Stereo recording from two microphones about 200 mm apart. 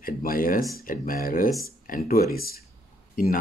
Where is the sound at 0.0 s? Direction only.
45° left (ahead or behind).